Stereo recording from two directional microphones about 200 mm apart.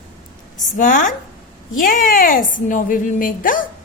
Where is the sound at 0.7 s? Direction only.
40° left (ahead or behind).